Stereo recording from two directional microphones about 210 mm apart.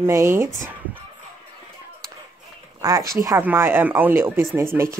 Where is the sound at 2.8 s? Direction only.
15° right (ahead or behind).